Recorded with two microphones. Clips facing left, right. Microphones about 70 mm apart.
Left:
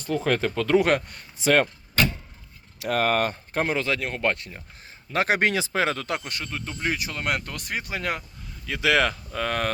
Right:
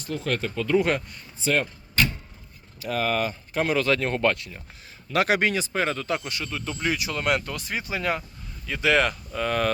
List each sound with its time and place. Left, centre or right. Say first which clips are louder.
0.5 s speech: left 1 dB; left
1.4 s speech: left 4 dB; left
2.7 s speech: left 3 dB; left
3.6 s speech: right 2 dB; left
4.4 s speech: even; left
5.4 s speech: left 1 dB; left
6.5 s speech: right 1 dB; left
8.6 s speech: even; left